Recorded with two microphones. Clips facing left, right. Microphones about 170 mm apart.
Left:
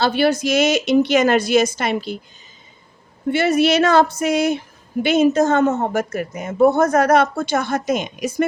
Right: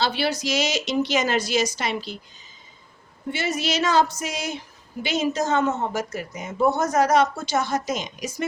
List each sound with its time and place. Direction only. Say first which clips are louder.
0.0 s a woman's voice: left 7 dB; 50° left (ahead or behind)
3.3 s a woman's voice: left 10 dB; 60° left (ahead or behind)